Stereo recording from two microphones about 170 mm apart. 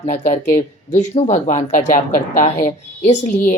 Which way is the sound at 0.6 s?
35° left (ahead or behind).